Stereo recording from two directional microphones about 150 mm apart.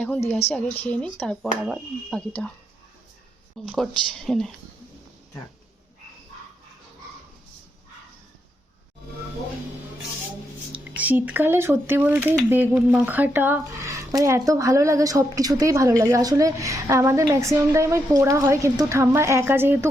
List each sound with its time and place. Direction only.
0.0 s a woman's voice: 10° left (ahead or behind)
3.7 s speech: 5° left (ahead or behind)
10.7 s speech: 10° right (ahead or behind)